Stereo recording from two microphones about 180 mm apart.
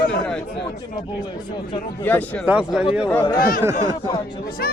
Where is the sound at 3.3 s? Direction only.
50° left (ahead or behind).